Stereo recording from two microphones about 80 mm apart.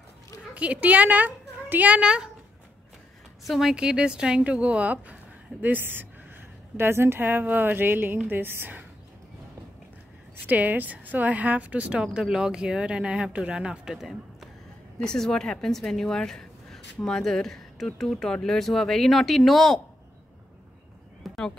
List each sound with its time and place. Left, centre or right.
0.6 s a woman's voice: centre
3.4 s a woman's voice: centre; by 8.8 s right
10.4 s speech: right; by 14.5 s centre
15.0 s a woman's voice: centre
21.2 s a sound: centre